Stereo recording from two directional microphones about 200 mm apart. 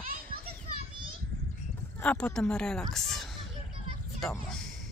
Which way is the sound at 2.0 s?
5° left (ahead or behind).